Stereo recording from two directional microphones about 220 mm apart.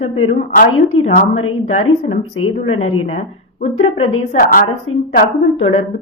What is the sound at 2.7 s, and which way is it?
Speech, 70° left (ahead or behind).